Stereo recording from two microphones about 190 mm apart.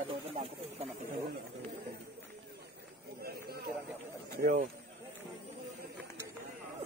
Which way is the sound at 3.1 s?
55° right (ahead or behind).